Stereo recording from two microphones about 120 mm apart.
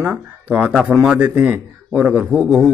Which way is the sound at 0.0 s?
15° right (ahead or behind).